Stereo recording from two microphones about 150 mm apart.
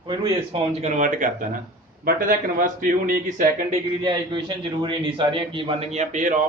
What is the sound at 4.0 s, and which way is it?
A man's voice, 30° right (ahead or behind).